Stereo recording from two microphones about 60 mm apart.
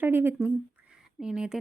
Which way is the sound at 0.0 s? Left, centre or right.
Right.